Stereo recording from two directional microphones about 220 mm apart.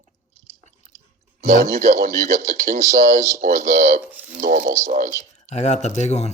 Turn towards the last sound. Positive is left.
turn(degrees=30)  # may be behind; listen again after turning